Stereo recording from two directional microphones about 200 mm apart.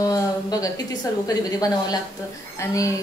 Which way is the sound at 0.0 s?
15° left (ahead or behind).